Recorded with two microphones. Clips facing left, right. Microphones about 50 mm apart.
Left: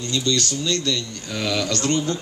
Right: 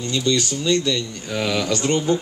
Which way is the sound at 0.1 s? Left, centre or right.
Centre.